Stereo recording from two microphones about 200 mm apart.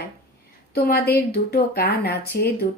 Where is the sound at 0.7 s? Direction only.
50° left (ahead or behind).